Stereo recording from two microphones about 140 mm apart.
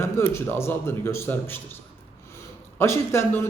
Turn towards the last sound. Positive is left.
turn(degrees=15)  # may be behind; listen again after turning